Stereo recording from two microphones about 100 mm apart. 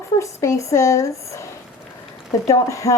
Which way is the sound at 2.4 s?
35° left (ahead or behind).